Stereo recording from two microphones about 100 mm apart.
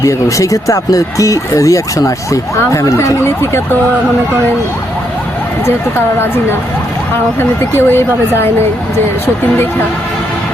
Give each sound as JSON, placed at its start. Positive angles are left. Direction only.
{"t": 0.0, "sound": "speech", "side_deg": 35}
{"t": 7.3, "sound": "speech", "side_deg": 20}